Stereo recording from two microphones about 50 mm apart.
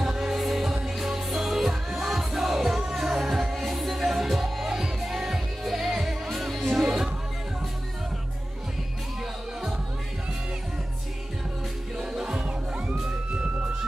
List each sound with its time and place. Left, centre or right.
0.0 s music: centre
12.0 s music: centre